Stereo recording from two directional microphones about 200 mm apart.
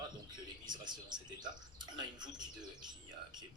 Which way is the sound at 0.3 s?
20° right (ahead or behind).